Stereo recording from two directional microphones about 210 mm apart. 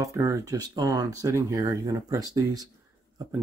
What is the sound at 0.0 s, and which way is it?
Speech, 15° right (ahead or behind).